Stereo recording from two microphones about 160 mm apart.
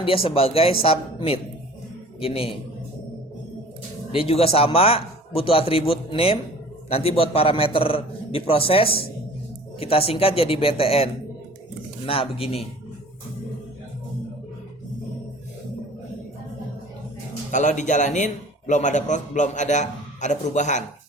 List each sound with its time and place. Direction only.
0.0 s speech: 35° left (ahead or behind)
4.1 s speech: 35° left (ahead or behind)
17.5 s a man's voice: 50° left (ahead or behind)